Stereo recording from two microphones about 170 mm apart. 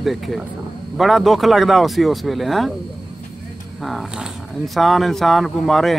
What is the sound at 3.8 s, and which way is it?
Speech, centre (ahead or behind).